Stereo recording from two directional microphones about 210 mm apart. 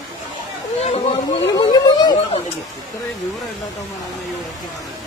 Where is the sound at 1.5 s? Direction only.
20° left (ahead or behind).